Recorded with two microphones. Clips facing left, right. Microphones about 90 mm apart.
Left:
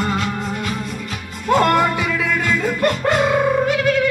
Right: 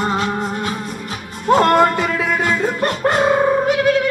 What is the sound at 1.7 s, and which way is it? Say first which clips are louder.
Music: right 3 dB; 45° right (ahead or behind).